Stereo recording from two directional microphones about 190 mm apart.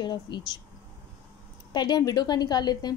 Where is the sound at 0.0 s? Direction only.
25° left (ahead or behind).